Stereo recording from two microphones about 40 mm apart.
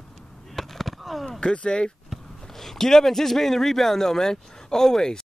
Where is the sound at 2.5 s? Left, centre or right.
Centre.